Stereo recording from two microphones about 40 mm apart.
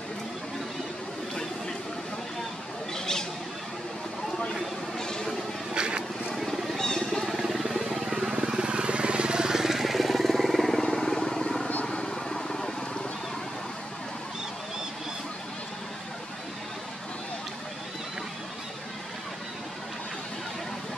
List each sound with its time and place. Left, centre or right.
2.9 s a sound: centre
4.9 s vehicle: centre
5.8 s vehicle: right
6.3 s vehicle: centre
6.8 s a sound: centre
8.0 s vehicle: centre